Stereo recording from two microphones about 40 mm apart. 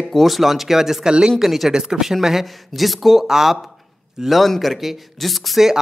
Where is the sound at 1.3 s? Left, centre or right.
Centre.